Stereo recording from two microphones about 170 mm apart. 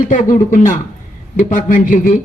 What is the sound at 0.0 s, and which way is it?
A man's voice, 50° left (ahead or behind).